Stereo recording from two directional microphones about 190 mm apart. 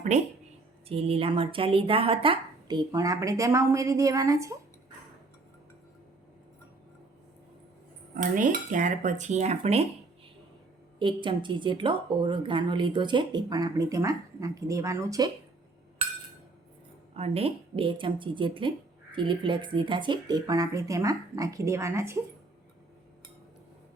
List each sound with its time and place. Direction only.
0.1 s cutlery: 35° right (ahead or behind)
0.9 s speech: 30° right (ahead or behind)
8.1 s cutlery: 45° right (ahead or behind)
11.0 s a woman's voice: 25° right (ahead or behind)
17.2 s a woman's voice: 30° right (ahead or behind); by 22.2 s 15° right (ahead or behind)